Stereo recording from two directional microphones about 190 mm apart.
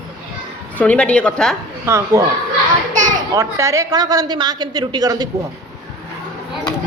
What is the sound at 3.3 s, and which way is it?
A woman's voice, 15° right (ahead or behind).